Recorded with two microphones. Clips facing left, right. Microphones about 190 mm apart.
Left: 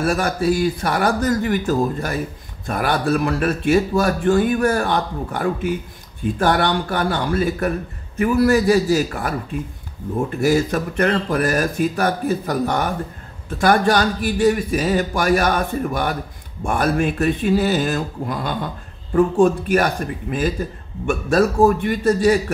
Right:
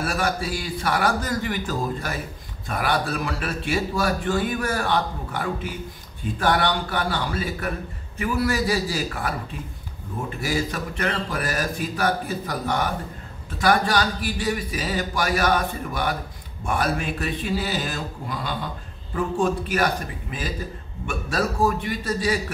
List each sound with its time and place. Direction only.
0.0 s a man's voice: 45° left (ahead or behind)
10.4 s a man's voice: 50° left (ahead or behind)